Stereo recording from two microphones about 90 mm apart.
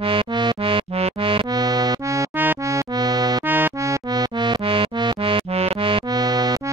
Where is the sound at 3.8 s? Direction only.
35° right (ahead or behind).